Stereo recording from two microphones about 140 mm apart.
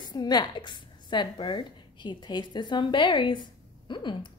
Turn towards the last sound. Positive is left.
turn(degrees=35)  # may be behind; listen again after turning